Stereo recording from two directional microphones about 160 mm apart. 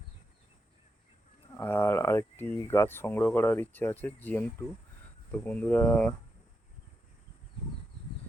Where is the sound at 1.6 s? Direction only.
10° left (ahead or behind).